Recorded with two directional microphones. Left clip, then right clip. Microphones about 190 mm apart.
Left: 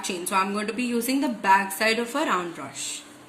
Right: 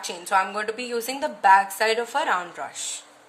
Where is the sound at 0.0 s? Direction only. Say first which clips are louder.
Right 2 dB; 55° right (ahead or behind).